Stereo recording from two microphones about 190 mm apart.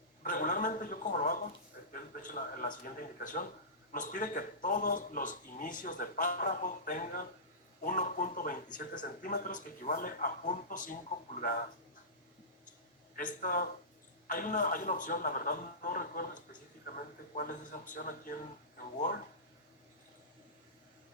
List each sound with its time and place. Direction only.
0.2 s speech: 45° left (ahead or behind)
13.1 s speech: 45° left (ahead or behind)